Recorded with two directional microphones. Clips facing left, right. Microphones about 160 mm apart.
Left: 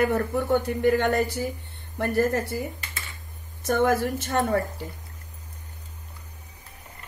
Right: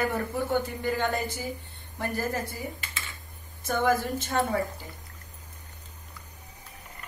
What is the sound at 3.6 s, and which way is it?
Speech, 70° left (ahead or behind).